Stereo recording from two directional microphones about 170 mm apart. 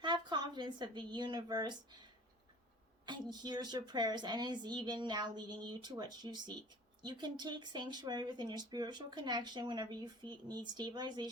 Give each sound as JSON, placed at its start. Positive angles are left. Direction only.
{"t": 0.0, "sound": "a woman's voice", "side_deg": -25}
{"t": 3.1, "sound": "speech", "side_deg": -25}